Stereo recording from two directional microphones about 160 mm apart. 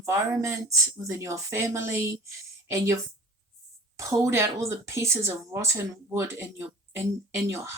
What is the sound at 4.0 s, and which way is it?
Speech, 20° right (ahead or behind).